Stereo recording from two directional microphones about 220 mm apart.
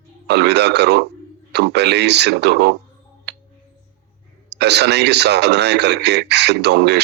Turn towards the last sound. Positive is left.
turn(degrees=-50)  # may be behind; listen again after turning